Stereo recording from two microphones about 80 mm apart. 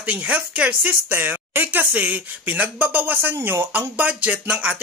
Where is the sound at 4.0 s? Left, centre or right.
Centre.